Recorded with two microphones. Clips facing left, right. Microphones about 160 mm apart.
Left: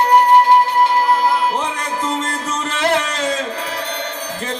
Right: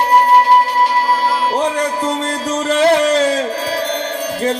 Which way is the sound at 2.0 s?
35° right (ahead or behind).